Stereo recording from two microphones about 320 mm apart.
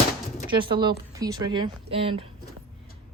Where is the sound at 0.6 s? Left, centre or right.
Centre.